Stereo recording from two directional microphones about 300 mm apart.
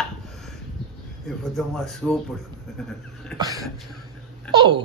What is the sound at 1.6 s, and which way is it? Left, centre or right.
Speech, centre.